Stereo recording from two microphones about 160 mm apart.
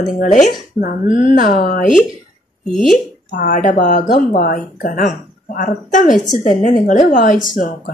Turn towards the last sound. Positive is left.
turn(degrees=60)  # may be behind; listen again after turning